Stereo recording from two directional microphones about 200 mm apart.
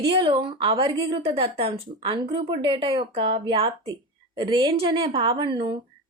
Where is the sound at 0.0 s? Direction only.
25° right (ahead or behind).